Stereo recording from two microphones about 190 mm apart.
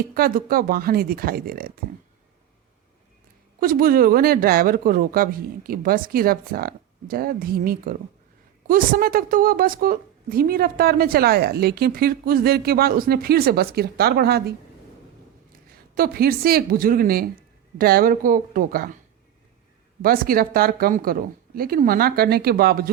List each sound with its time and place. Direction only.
0.1 s a woman's voice: 50° right (ahead or behind)
3.6 s a woman's voice: 50° right (ahead or behind)
16.0 s a woman's voice: 55° right (ahead or behind)
20.0 s a woman's voice: 50° right (ahead or behind)